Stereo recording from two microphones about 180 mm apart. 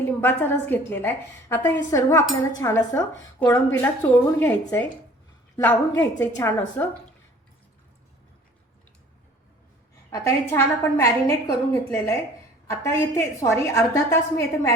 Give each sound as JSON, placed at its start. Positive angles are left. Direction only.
{"t": 0.0, "sound": "a woman's voice", "side_deg": 10}
{"t": 6.0, "sound": "a woman's voice", "side_deg": 15}
{"t": 10.1, "sound": "a woman's voice", "side_deg": 15}